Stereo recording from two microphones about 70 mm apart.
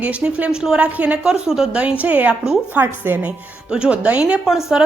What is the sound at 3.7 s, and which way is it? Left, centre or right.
A woman's voice, centre.